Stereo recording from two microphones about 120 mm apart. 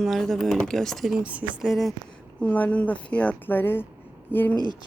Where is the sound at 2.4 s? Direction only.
10° left (ahead or behind).